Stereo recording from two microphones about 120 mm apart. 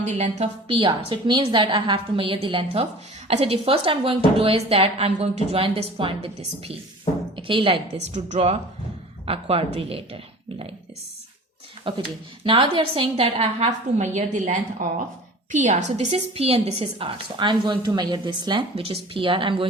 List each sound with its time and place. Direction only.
0.0 s a woman's voice: 75° right (ahead or behind)
0.7 s a woman's voice: 50° right (ahead or behind)
3.2 s a woman's voice: 60° right (ahead or behind)
8.1 s a woman's voice: 70° right (ahead or behind)
9.2 s a woman's voice: 55° right (ahead or behind)
11.9 s a woman's voice: 45° right (ahead or behind)